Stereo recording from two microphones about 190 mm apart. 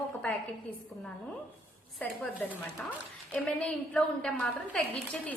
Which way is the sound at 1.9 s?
5° left (ahead or behind).